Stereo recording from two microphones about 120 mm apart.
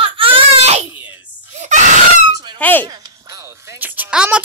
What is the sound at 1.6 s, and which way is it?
Wail, 80° right.